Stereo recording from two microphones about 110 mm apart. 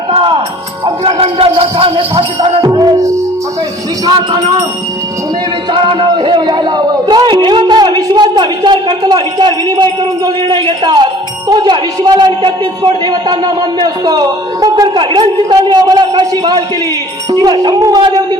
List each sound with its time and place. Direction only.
0.1 s music: 50° right (ahead or behind)
0.9 s speech: 55° right (ahead or behind)
5.7 s speech: 50° right (ahead or behind)